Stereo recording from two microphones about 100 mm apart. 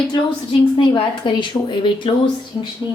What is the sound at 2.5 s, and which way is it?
Speech, 55° left (ahead or behind).